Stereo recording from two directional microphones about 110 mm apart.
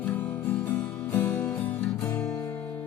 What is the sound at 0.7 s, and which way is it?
Music, 15° left (ahead or behind).